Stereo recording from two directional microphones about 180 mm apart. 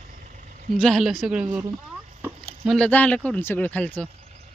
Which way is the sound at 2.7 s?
5° left (ahead or behind).